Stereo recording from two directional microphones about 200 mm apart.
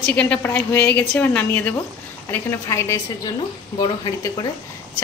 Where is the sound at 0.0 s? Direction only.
5° left (ahead or behind); by 4.5 s 20° left (ahead or behind).